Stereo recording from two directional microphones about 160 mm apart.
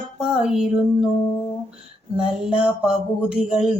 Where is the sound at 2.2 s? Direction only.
5° right (ahead or behind).